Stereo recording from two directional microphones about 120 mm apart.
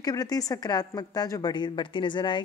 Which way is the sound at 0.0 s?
30° left (ahead or behind).